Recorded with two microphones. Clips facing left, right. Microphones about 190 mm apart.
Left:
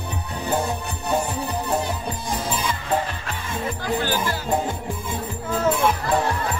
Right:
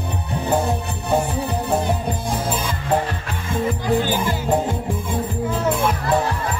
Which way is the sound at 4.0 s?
15° right (ahead or behind).